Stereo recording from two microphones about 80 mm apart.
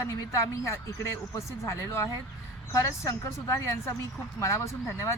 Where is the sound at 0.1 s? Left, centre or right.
Left.